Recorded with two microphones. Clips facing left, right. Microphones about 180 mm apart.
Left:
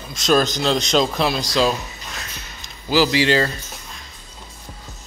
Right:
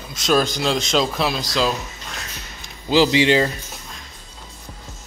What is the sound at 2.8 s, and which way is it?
Speech, 25° right (ahead or behind).